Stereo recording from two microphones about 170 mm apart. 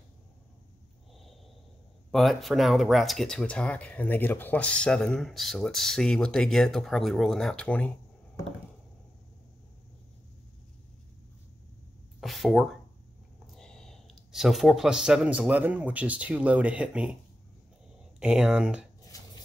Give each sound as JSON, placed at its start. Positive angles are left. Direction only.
{"t": 2.0, "sound": "speech", "side_deg": 0}
{"t": 12.2, "sound": "a sound", "side_deg": 0}
{"t": 13.5, "sound": "speech", "side_deg": 5}
{"t": 18.2, "sound": "speech", "side_deg": -5}
{"t": 19.0, "sound": "chopping", "side_deg": 20}